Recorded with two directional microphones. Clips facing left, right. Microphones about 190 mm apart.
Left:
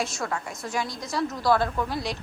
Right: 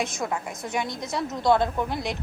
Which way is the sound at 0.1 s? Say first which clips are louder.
Right 2 dB; 15° right (ahead or behind).